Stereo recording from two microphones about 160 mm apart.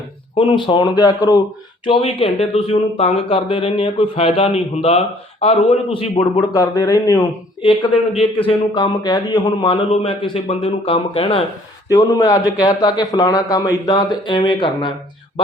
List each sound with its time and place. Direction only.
0.3 s a man's voice: 30° left (ahead or behind)
6.5 s a man's voice: 25° left (ahead or behind)
8.4 s a man's voice: 30° left (ahead or behind)
9.9 s speech: 35° left (ahead or behind)
11.9 s a man's voice: 20° left (ahead or behind)